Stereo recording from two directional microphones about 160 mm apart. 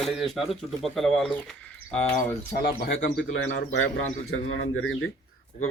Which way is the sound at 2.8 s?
90° left.